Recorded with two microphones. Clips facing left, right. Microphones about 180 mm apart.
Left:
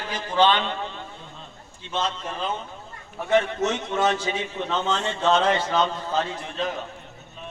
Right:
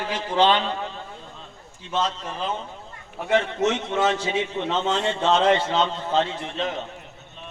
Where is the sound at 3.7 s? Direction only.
25° right (ahead or behind).